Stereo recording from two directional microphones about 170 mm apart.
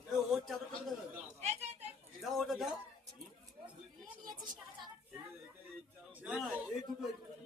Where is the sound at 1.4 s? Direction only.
40° right (ahead or behind).